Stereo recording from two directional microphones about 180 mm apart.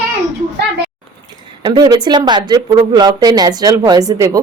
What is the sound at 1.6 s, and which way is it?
Speech, 25° right (ahead or behind).